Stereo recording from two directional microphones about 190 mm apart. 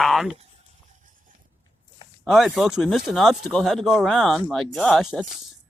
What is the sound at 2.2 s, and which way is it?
Speech, centre (ahead or behind).